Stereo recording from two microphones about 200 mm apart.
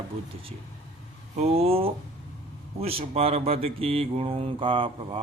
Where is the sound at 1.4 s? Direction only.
30° right (ahead or behind).